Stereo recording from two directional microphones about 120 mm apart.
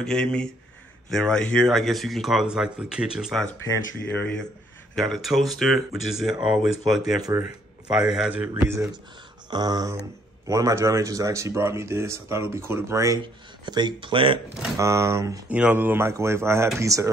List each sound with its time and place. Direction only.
0.0 s speech: 5° left (ahead or behind)
4.1 s speech: 10° left (ahead or behind); by 6.7 s 10° right (ahead or behind)
7.2 s speech: 30° right (ahead or behind)
7.9 s speech: 5° right (ahead or behind)
8.5 s speech: 25° right (ahead or behind)
9.5 s speech: 35° right (ahead or behind)
13.7 s speech: 40° right (ahead or behind)
14.8 s speech: 25° right (ahead or behind)
15.5 s speech: 15° right (ahead or behind)